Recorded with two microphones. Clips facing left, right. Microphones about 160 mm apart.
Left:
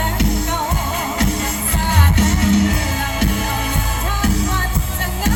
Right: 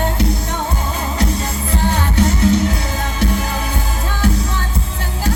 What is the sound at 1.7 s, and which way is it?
Music, 35° right (ahead or behind).